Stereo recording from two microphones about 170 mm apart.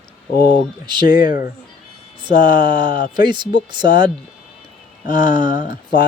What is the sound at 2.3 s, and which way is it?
Speech, 55° left (ahead or behind).